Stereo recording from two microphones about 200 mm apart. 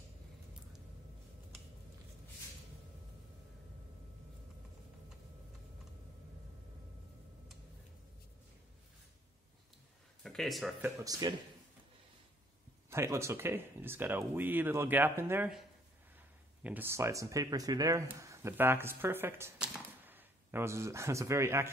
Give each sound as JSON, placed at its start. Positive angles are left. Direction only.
{"t": 10.2, "sound": "speech", "side_deg": 0}
{"t": 11.0, "sound": "a man's voice", "side_deg": -20}
{"t": 12.9, "sound": "speech", "side_deg": -15}
{"t": 16.6, "sound": "speech", "side_deg": -10}